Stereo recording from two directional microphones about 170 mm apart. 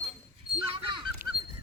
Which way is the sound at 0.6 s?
30° right (ahead or behind).